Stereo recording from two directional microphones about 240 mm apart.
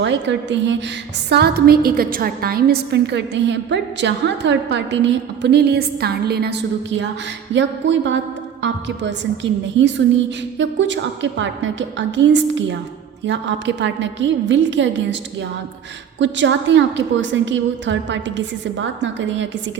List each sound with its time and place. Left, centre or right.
0.0 s a woman's voice: right